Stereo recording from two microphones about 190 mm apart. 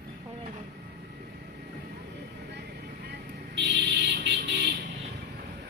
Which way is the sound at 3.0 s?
65° right (ahead or behind).